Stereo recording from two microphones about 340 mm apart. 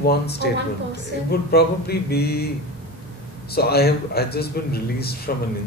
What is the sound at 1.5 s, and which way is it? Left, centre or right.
Speech, left.